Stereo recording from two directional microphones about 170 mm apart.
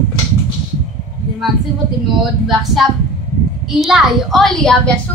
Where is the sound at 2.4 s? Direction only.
Centre (ahead or behind).